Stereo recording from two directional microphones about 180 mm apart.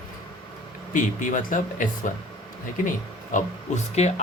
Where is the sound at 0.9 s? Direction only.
45° left (ahead or behind).